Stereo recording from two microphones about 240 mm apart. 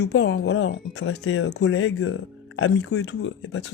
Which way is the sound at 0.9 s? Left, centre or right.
Left.